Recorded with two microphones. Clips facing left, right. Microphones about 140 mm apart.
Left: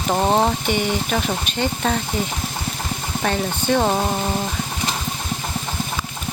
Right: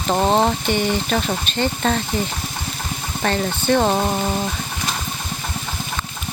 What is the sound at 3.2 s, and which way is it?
Speech, 10° left (ahead or behind).